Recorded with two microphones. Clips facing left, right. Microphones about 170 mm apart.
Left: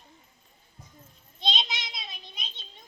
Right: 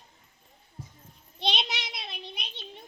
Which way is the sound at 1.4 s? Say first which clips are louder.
Right 2 dB; 65° right (ahead or behind).